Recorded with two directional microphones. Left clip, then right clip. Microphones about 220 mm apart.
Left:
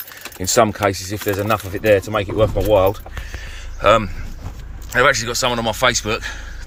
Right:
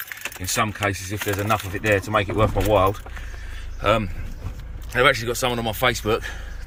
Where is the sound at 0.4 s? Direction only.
15° left (ahead or behind).